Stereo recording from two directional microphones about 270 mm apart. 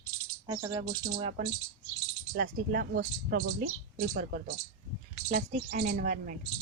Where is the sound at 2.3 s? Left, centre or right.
Right.